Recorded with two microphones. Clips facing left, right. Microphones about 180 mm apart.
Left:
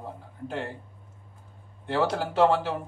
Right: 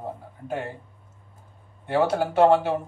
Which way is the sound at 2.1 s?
55° right (ahead or behind).